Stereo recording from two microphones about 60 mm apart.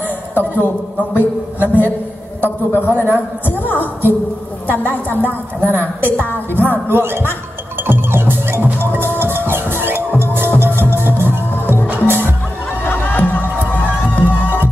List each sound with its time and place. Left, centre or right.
0.3 s a man's voice: left
1.1 s a man's voice: right
2.7 s a woman's voice: left
6.9 s a man's voice: right
7.8 s music: right
12.8 s music: left